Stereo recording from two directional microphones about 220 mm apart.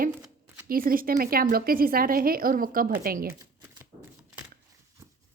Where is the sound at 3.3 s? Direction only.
10° right (ahead or behind).